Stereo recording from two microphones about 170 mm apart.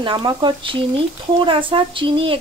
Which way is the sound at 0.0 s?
30° right (ahead or behind).